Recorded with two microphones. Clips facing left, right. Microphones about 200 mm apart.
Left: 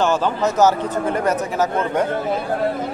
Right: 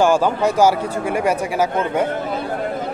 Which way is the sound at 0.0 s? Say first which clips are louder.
Right 3 dB; 10° right (ahead or behind).